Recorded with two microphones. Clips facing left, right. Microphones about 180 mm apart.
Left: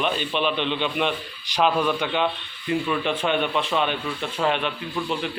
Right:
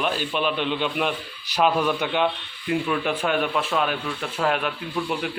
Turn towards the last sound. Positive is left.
turn(degrees=-5)  # may be behind; listen again after turning